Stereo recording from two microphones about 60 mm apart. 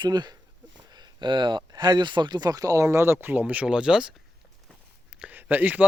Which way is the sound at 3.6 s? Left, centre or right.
Centre.